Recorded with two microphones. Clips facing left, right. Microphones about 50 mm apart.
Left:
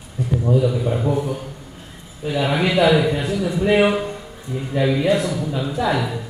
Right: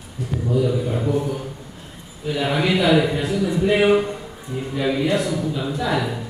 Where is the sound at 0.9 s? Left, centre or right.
Centre.